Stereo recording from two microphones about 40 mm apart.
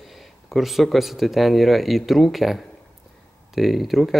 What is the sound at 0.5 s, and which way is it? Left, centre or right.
A man's voice, centre.